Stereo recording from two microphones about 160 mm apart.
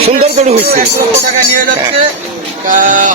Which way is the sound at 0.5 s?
70° right (ahead or behind).